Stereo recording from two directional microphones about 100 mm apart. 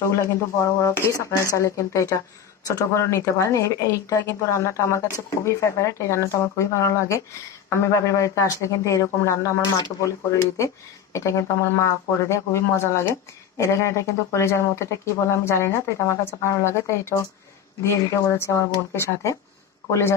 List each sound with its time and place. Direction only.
0.1 s speech: 30° left (ahead or behind)
11.1 s speech: 30° left (ahead or behind)